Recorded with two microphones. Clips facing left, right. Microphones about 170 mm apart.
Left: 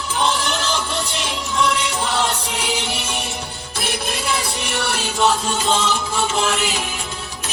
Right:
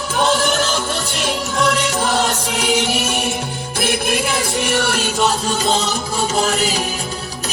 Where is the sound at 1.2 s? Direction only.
45° right (ahead or behind).